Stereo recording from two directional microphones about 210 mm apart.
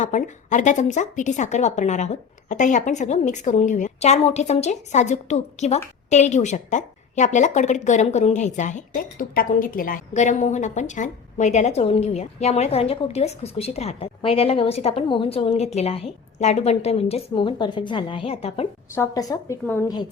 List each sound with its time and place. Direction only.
0.0 s a woman's voice: 35° left (ahead or behind)
18.9 s a woman's voice: 15° left (ahead or behind)